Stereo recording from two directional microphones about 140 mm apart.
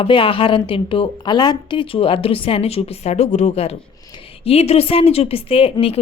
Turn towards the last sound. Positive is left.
turn(degrees=40)  # may be behind; listen again after turning